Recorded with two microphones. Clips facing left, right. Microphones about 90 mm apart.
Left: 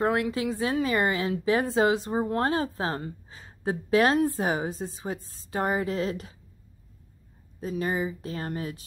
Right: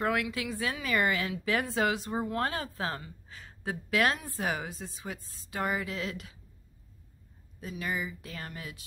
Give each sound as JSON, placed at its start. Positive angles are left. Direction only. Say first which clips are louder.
{"t": 0.0, "sound": "a woman's voice", "louder": "left 5 dB", "side_deg": 30}
{"t": 7.6, "sound": "a woman's voice", "louder": "left 7 dB", "side_deg": 35}